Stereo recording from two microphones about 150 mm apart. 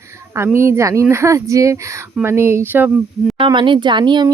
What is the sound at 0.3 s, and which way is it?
Speech, 15° right (ahead or behind).